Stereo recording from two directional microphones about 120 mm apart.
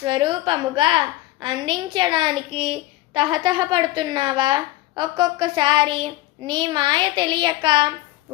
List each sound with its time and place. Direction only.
0.0 s a woman's voice: 45° right (ahead or behind)